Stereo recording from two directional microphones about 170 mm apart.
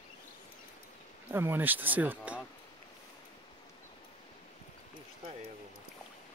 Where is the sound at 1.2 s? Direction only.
10° right (ahead or behind).